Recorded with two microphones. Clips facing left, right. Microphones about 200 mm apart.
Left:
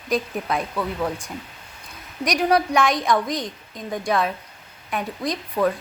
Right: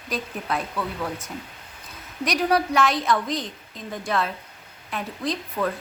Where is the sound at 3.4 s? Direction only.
40° left (ahead or behind).